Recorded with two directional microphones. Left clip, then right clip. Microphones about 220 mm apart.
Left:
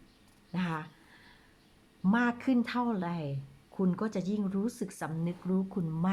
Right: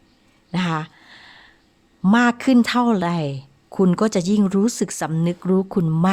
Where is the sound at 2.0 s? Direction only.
45° right (ahead or behind).